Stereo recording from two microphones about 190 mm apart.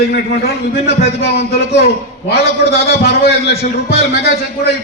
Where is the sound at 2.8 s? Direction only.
55° left (ahead or behind).